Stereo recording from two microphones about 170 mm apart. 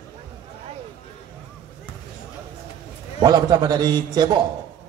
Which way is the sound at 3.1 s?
25° right (ahead or behind).